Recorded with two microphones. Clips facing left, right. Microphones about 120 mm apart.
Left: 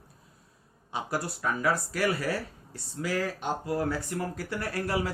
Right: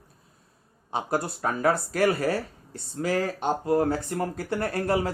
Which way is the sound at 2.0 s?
55° right (ahead or behind).